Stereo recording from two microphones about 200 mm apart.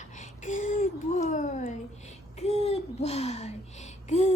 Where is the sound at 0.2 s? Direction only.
40° left (ahead or behind).